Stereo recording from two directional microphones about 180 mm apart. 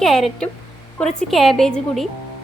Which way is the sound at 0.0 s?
Centre (ahead or behind).